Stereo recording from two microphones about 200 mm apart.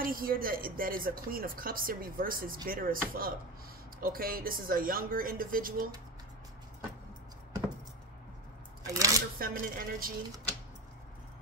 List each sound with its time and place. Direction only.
0.0 s speech: 45° right (ahead or behind)
8.9 s speech: 15° right (ahead or behind)
9.4 s speech: 45° right (ahead or behind)